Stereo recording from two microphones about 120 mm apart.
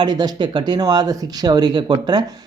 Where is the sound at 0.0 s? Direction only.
35° right (ahead or behind).